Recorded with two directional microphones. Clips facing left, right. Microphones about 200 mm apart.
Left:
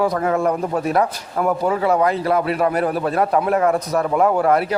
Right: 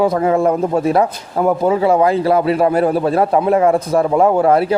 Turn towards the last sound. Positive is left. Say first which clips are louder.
# right 4 dB
turn(degrees=-25)  # may be behind; listen again after turning